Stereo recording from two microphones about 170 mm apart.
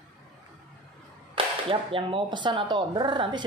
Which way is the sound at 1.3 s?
30° right (ahead or behind).